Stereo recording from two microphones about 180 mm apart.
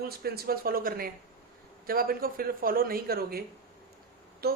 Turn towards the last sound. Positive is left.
turn(degrees=-60)  # may be behind; listen again after turning